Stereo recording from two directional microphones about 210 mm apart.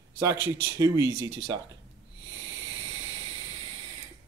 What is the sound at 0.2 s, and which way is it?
Speech, 15° right (ahead or behind).